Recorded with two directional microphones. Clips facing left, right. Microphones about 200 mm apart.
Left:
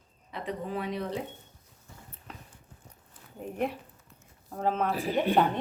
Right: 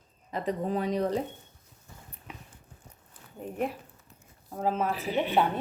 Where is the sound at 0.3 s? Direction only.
40° right (ahead or behind).